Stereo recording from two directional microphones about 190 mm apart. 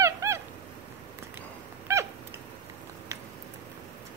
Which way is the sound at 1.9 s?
15° right (ahead or behind).